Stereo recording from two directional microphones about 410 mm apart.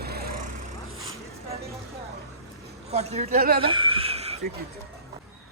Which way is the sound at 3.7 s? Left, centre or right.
Centre.